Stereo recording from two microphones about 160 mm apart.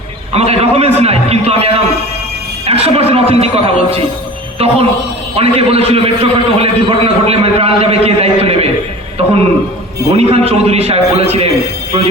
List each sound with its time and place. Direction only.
0.3 s a man's voice: 40° right (ahead or behind)
5.4 s a man's voice: 40° right (ahead or behind)
10.1 s a man's voice: 40° right (ahead or behind)